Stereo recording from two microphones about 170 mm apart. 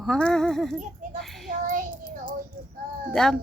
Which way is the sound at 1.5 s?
55° right (ahead or behind).